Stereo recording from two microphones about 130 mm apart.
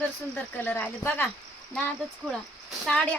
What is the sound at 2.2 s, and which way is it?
Speech, 5° left (ahead or behind).